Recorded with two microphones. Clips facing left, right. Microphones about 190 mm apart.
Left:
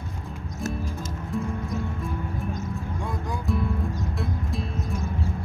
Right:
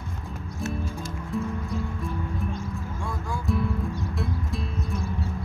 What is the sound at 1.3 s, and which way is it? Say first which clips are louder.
Music: even; centre (ahead or behind).